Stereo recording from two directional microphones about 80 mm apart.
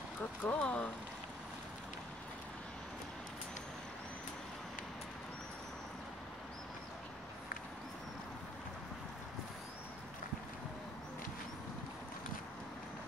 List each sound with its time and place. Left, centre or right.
0.4 s speech: centre